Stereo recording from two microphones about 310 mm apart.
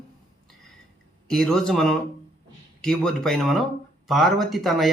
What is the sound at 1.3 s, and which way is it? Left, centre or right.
A man's voice, centre.